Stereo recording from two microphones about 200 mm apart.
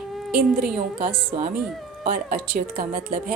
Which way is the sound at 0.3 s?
45° right (ahead or behind).